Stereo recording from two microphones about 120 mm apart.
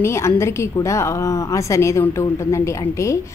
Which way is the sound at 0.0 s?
25° left (ahead or behind).